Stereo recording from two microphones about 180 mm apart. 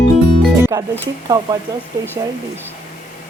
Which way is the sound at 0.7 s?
20° right (ahead or behind).